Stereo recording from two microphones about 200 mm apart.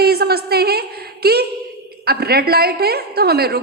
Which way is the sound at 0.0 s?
50° right (ahead or behind).